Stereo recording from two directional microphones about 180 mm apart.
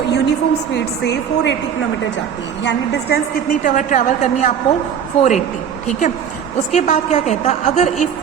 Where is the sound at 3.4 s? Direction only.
45° left (ahead or behind).